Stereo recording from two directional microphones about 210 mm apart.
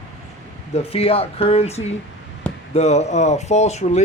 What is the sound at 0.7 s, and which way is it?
Speech, 30° left (ahead or behind).